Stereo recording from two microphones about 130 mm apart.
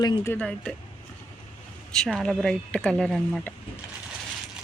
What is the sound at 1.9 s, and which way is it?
A woman's voice, 5° left (ahead or behind).